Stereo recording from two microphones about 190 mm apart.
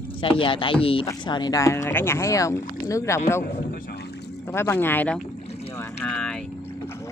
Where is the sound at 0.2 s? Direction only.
25° left (ahead or behind).